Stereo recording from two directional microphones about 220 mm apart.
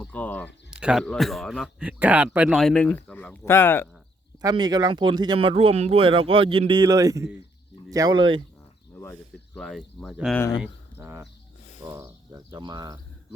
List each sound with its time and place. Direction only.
0.0 s speech: 5° left (ahead or behind)
0.7 s speech: 5° right (ahead or behind)
4.4 s speech: 20° right (ahead or behind)
9.6 s speech: centre (ahead or behind)
10.6 s a sound: 10° right (ahead or behind)
11.9 s speech: 15° right (ahead or behind)